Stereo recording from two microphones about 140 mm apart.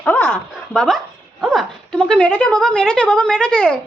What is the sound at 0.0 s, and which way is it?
Speech, 10° left (ahead or behind).